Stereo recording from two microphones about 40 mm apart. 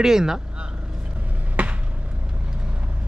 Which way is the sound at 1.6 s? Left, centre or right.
Right.